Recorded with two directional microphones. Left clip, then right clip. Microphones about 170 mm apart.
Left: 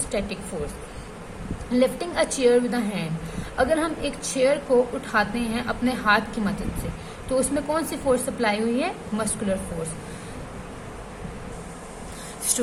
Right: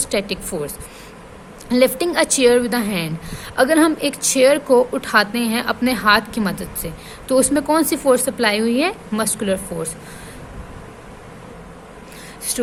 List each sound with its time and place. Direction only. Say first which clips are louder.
0.1 s speech: right 7 dB; 65° right (ahead or behind)
1.7 s a woman's voice: right 7 dB; 60° right (ahead or behind)